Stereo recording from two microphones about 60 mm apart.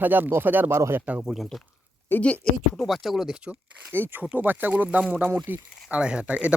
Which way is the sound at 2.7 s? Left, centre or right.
Centre.